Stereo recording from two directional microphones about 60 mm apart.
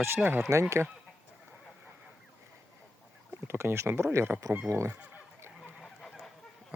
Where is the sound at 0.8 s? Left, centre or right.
Right.